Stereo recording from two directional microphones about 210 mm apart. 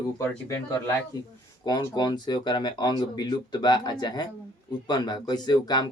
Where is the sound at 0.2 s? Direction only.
15° left (ahead or behind).